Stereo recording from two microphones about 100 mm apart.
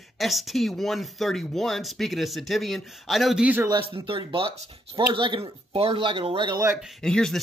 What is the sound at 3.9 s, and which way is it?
Speech, 60° right (ahead or behind).